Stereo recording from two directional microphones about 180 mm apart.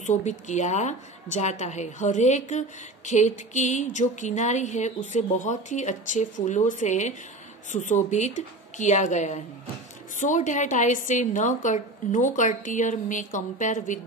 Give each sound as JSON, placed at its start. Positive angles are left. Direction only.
{"t": 0.0, "sound": "a woman's voice", "side_deg": 40}